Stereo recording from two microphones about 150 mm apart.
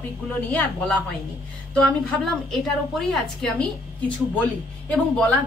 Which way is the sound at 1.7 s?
5° left (ahead or behind).